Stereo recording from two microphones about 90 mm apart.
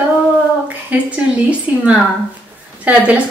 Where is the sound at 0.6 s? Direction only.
15° right (ahead or behind).